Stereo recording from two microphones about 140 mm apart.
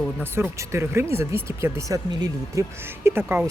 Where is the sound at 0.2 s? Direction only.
15° right (ahead or behind).